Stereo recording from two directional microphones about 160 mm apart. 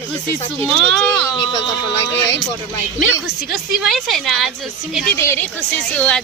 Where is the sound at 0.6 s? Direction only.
10° left (ahead or behind).